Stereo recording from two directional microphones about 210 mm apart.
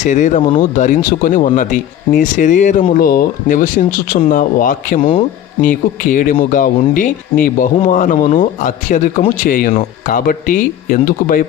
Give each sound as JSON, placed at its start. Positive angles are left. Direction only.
{"t": 0.0, "sound": "speech", "side_deg": 35}